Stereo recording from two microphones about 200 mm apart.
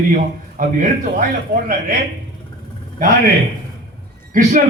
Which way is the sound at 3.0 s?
50° right (ahead or behind).